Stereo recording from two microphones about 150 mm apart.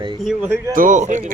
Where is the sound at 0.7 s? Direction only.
60° right (ahead or behind).